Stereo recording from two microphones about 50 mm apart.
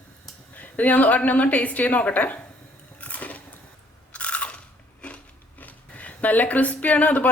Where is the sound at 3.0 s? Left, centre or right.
Left.